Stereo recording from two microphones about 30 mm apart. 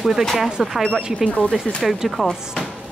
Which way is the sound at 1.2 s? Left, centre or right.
Left.